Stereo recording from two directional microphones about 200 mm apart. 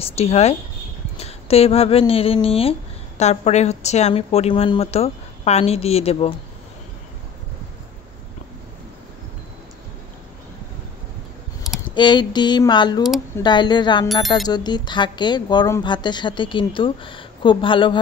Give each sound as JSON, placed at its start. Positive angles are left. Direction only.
{"t": 0.0, "sound": "speech", "side_deg": 30}
{"t": 11.9, "sound": "a woman's voice", "side_deg": 25}